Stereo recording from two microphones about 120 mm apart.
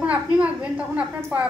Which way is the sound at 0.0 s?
10° right (ahead or behind).